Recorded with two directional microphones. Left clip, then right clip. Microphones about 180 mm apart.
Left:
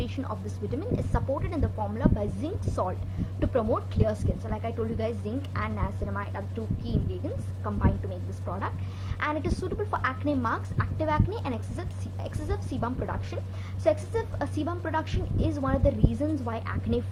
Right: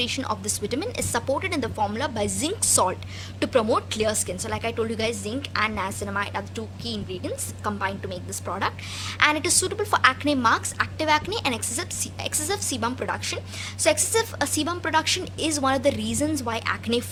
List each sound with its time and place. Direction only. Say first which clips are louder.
0.0 s a woman's voice: right 9 dB; 20° right (ahead or behind)
7.6 s a woman's voice: right 4 dB; 25° right (ahead or behind)